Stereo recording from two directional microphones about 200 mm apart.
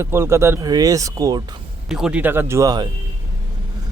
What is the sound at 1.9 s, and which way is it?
Speech, 5° right (ahead or behind).